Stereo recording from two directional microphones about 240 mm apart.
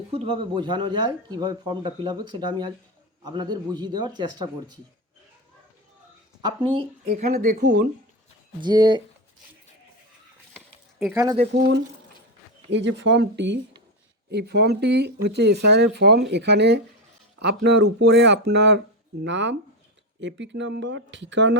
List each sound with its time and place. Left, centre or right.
0.1 s a man's voice: right
6.4 s speech: centre
7.3 s speech: right
8.6 s a man's voice: centre
11.0 s a man's voice: centre
11.5 s speech: right